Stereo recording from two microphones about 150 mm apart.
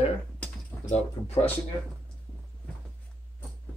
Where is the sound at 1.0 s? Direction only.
45° left (ahead or behind).